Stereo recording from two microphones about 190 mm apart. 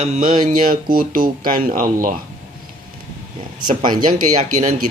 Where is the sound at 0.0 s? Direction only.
40° right (ahead or behind).